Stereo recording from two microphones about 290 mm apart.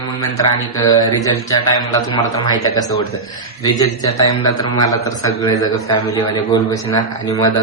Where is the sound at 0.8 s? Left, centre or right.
Centre.